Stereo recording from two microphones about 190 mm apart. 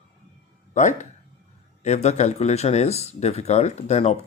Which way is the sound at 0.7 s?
40° left (ahead or behind).